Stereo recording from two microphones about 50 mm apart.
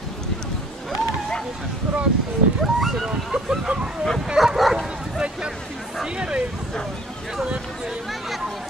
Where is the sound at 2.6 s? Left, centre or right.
Centre.